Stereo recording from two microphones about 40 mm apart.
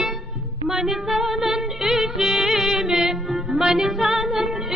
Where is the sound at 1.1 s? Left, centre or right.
Centre.